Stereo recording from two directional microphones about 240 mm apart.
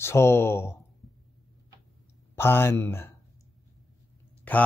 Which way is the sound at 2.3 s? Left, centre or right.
Centre.